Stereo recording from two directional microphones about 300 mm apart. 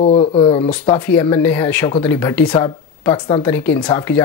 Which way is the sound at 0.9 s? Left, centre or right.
Centre.